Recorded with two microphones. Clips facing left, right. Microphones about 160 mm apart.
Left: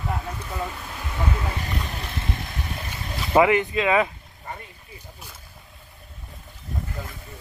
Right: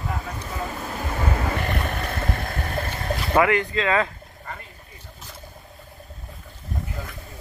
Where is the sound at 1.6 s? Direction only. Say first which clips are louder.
Right 5 dB; 60° right (ahead or behind).